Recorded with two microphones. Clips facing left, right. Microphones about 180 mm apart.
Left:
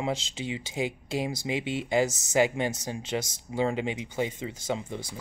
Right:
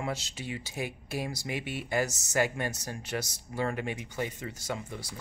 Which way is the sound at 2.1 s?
90° left.